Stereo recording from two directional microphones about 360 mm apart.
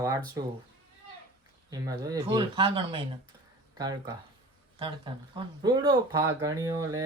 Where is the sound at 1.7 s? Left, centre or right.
Centre.